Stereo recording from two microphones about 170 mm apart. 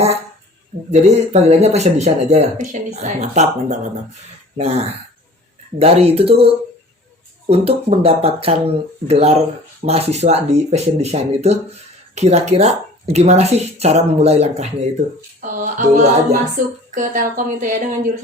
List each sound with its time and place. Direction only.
0.9 s speech: 40° right (ahead or behind)
15.4 s music: 45° right (ahead or behind)